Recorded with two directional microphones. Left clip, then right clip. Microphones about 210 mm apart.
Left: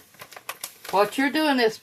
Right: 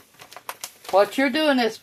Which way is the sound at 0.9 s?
30° right (ahead or behind).